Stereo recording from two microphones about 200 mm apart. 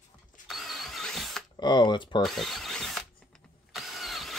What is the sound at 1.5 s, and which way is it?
Speech, 20° left (ahead or behind).